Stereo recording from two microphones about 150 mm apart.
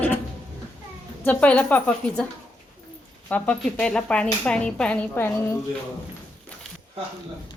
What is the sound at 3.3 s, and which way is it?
Speech, 10° left (ahead or behind).